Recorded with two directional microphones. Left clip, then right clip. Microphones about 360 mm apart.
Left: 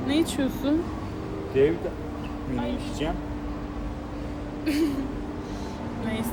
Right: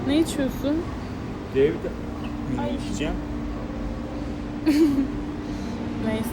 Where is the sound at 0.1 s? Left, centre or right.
Centre.